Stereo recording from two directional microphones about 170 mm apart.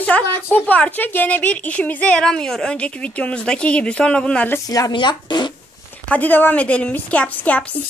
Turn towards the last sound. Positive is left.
turn(degrees=10)  # may be behind; listen again after turning